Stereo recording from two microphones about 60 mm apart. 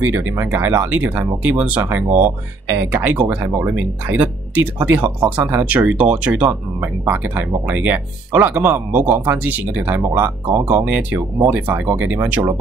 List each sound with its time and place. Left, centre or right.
0.0 s speech: right
2.7 s speech: right
3.0 s speech: right